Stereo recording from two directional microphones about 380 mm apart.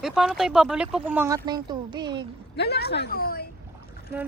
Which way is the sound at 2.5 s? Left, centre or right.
Left.